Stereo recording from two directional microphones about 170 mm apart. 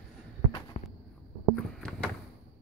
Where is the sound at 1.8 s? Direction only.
5° left (ahead or behind).